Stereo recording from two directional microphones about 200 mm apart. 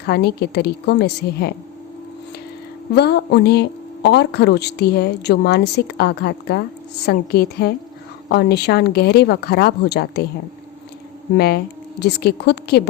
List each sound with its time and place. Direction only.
0.0 s speech: 55° left (ahead or behind)
2.9 s speech: 55° left (ahead or behind)
11.3 s speech: 50° left (ahead or behind)